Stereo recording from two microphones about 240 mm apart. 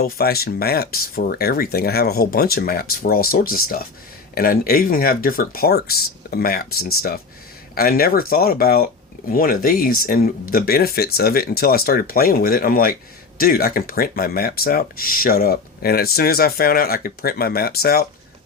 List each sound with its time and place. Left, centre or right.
0.0 s speech: left